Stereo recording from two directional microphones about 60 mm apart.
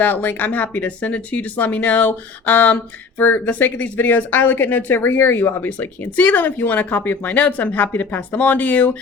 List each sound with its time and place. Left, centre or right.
0.0 s speech: left